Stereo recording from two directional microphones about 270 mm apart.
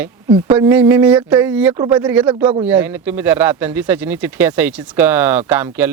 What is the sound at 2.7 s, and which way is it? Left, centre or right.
Speech, centre.